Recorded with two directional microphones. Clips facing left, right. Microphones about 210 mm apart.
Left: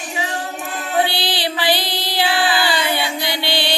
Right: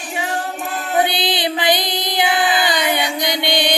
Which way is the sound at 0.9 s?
20° right (ahead or behind).